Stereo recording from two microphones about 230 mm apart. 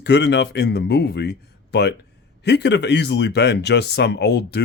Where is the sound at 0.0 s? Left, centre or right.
Left.